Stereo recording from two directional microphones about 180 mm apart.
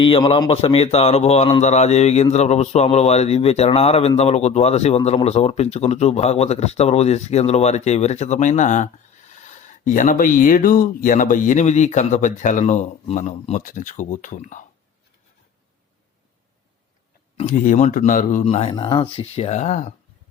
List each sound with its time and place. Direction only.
0.0 s speech: 30° left (ahead or behind)
17.3 s speech: 40° left (ahead or behind)